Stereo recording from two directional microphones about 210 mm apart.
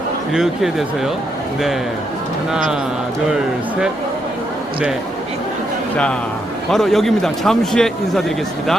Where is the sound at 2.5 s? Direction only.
5° right (ahead or behind).